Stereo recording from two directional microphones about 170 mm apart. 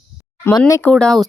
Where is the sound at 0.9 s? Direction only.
5° left (ahead or behind).